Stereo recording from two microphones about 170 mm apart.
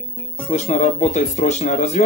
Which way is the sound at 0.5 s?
45° left (ahead or behind).